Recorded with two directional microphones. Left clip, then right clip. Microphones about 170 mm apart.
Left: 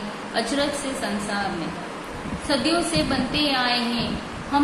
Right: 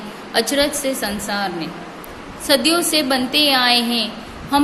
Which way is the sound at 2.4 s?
75° right (ahead or behind).